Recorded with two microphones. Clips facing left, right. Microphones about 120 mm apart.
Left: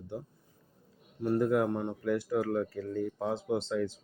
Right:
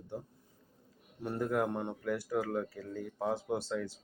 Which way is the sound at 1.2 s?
Centre (ahead or behind).